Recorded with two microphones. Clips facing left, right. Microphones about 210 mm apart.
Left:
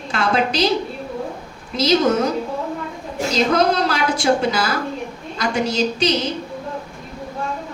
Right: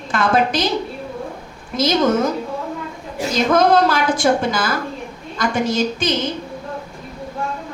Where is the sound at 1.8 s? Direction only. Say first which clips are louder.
Even; 50° right (ahead or behind).